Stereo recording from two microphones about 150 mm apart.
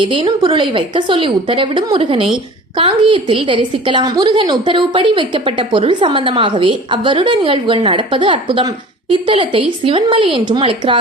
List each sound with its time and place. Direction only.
0.0 s a woman's voice: 35° right (ahead or behind)